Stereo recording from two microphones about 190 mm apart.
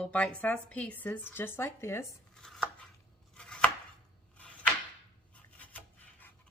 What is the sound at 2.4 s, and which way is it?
Chopping, centre (ahead or behind).